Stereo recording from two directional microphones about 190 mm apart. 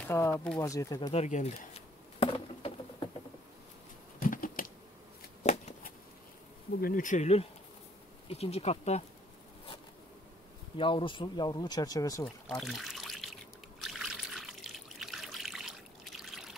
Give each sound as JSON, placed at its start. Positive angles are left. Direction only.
{"t": 0.1, "sound": "speech", "side_deg": 15}
{"t": 1.1, "sound": "a sound", "side_deg": 35}
{"t": 4.2, "sound": "typing", "side_deg": 45}
{"t": 5.4, "sound": "shuffling cards", "side_deg": 40}
{"t": 6.8, "sound": "speech", "side_deg": 45}
{"t": 10.8, "sound": "speech", "side_deg": 25}
{"t": 12.5, "sound": "trickle", "side_deg": 0}